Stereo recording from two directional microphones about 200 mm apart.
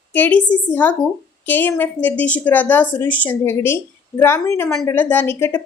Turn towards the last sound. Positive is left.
turn(degrees=10)  # may be behind; listen again after turning